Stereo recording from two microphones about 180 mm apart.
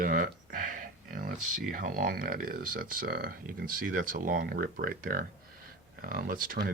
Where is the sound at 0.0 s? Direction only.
50° right (ahead or behind).